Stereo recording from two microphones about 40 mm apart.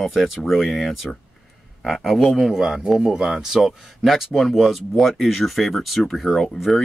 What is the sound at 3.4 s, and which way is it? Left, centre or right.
Speech, centre.